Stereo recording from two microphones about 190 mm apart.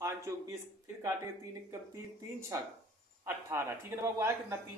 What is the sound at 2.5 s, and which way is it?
Speech, 20° right (ahead or behind).